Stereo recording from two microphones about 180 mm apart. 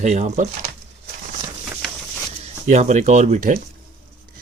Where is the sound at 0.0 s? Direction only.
40° right (ahead or behind).